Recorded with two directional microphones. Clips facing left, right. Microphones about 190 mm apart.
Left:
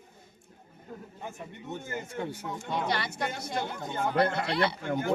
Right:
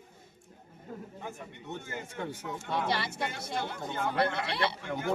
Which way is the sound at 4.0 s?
45° left (ahead or behind).